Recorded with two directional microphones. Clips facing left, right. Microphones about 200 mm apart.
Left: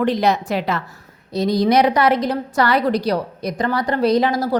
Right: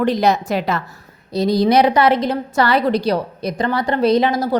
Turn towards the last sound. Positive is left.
turn(degrees=-20)  # may be behind; listen again after turning